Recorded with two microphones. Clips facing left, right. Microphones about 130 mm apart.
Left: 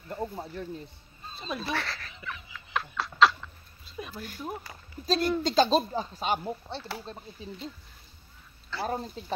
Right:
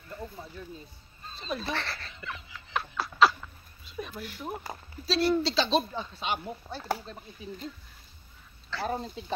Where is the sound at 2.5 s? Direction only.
5° right (ahead or behind).